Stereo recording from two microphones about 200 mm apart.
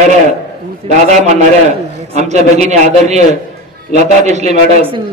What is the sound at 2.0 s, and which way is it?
A man's voice, 35° right (ahead or behind).